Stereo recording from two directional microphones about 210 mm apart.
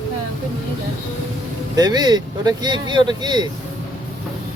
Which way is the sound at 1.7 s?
20° right (ahead or behind).